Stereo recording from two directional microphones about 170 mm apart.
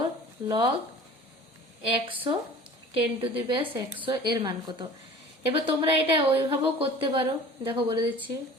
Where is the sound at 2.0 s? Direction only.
30° right (ahead or behind).